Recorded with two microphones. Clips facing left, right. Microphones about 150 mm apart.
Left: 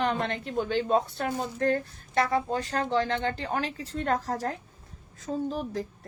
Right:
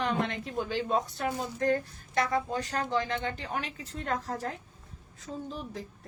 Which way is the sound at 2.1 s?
30° left (ahead or behind).